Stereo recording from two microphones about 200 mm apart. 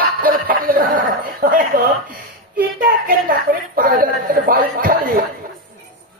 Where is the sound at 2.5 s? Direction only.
45° right (ahead or behind).